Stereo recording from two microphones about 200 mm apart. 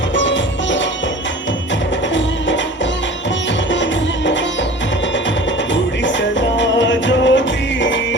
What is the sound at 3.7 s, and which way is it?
Music, 65° left (ahead or behind).